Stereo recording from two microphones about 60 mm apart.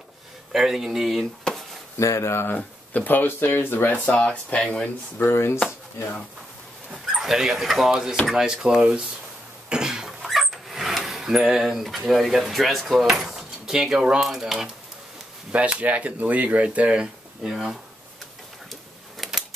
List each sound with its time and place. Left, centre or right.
0.5 s speech: centre
2.0 s speech: left
2.5 s speech: left
5.2 s speech: left
7.2 s speech: centre
9.7 s cough: centre
10.2 s a sound: centre
12.1 s speech: centre
14.2 s speech: centre
15.5 s speech: right
18.7 s a sound: centre